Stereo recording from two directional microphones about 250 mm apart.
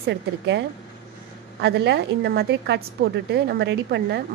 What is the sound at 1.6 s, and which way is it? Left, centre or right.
A woman's voice, right.